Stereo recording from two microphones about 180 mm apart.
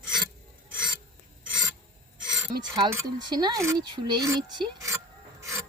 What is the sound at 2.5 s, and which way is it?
Speech, 25° right (ahead or behind).